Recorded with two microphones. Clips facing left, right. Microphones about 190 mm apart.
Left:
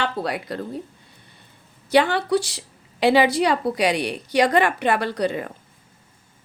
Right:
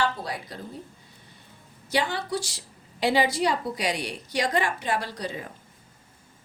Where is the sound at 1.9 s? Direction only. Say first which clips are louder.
Left 9 dB; 65° left (ahead or behind).